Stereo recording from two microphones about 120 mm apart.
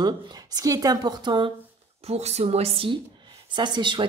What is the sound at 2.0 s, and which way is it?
Speech, 65° right (ahead or behind).